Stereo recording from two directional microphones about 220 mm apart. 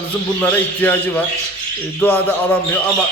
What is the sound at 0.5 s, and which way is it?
Speech, 10° left (ahead or behind).